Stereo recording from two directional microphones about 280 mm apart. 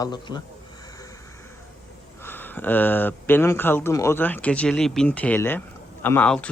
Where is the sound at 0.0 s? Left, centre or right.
Centre.